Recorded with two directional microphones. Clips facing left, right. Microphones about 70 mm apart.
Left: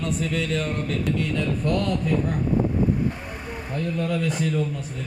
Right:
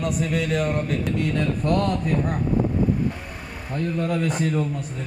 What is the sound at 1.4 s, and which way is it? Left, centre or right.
Speech, right.